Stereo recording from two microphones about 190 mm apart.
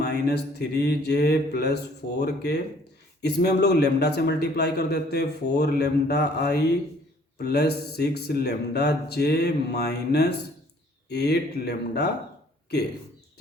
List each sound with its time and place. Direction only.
0.0 s a man's voice: 60° left (ahead or behind)